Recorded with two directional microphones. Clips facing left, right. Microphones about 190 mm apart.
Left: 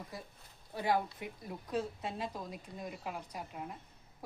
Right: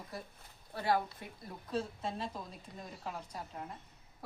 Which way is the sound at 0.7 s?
15° left (ahead or behind).